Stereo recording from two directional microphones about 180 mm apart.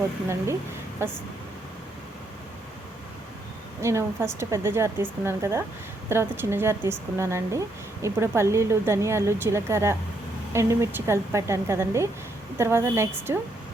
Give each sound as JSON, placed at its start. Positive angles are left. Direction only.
{"t": 1.0, "sound": "a woman's voice", "side_deg": -15}
{"t": 3.8, "sound": "a woman's voice", "side_deg": -15}